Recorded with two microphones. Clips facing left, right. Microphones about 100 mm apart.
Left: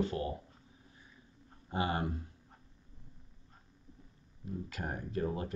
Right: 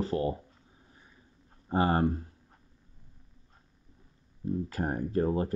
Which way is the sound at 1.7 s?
40° right (ahead or behind).